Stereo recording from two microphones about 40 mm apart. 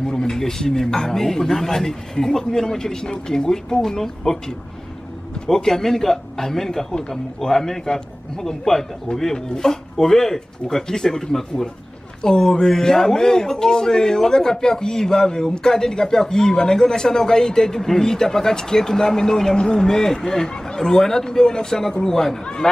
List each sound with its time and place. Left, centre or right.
0.0 s a man's voice: centre